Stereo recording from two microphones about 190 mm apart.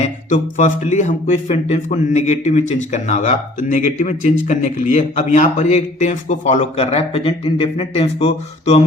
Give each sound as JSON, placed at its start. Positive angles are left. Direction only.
{"t": 0.0, "sound": "speech", "side_deg": 40}